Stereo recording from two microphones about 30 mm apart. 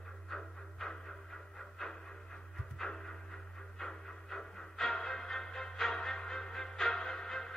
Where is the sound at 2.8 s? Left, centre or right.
Centre.